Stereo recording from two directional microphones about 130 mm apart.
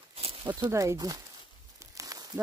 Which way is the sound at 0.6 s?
20° right (ahead or behind).